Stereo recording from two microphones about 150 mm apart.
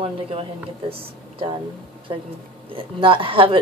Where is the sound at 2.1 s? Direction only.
35° right (ahead or behind).